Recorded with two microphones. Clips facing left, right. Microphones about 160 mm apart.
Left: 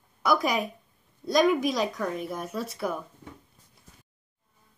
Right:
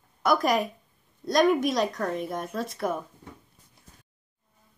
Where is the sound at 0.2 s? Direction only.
Centre (ahead or behind).